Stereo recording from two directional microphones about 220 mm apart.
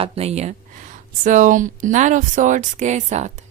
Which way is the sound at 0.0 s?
30° right (ahead or behind).